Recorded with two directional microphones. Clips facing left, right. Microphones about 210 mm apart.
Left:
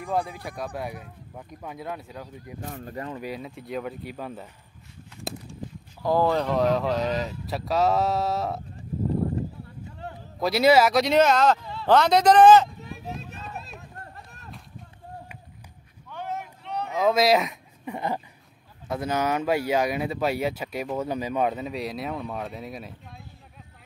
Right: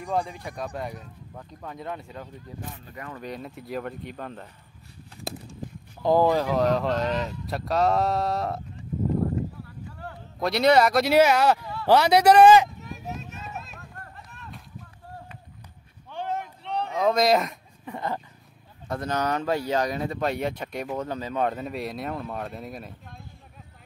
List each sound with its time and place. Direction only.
0.0 s speech: 5° left (ahead or behind)
2.7 s speech: 50° left (ahead or behind)
3.2 s speech: 5° left (ahead or behind)
6.0 s speech: 15° right (ahead or behind)
6.3 s speech: centre (ahead or behind)
9.6 s a sound: 20° left (ahead or behind)
10.4 s speech: 5° left (ahead or behind)
13.7 s run: 25° left (ahead or behind)
14.1 s run: 40° left (ahead or behind)
16.1 s vehicle: 30° right (ahead or behind)
16.9 s speech: centre (ahead or behind)
17.8 s speech: 15° left (ahead or behind)